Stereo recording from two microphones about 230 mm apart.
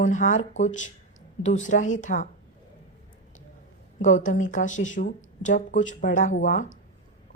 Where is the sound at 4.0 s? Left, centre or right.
Left.